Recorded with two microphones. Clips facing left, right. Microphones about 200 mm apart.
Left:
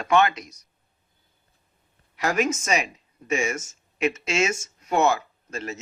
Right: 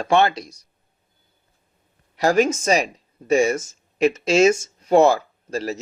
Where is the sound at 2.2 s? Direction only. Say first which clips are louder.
Right 6 dB; 30° right (ahead or behind).